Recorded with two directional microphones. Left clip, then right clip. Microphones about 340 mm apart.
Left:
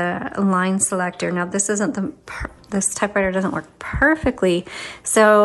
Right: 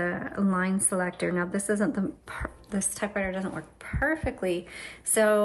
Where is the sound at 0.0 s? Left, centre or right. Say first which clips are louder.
Left 7 dB; centre.